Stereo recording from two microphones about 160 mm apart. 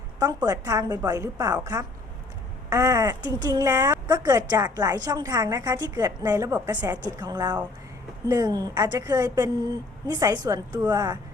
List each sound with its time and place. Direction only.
0.4 s a woman's voice: 20° right (ahead or behind)